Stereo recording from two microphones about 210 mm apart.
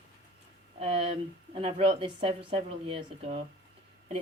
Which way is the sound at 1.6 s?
25° right (ahead or behind).